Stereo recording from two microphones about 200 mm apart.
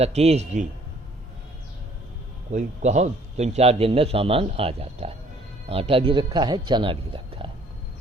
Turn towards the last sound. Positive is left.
turn(degrees=-25)  # may be behind; listen again after turning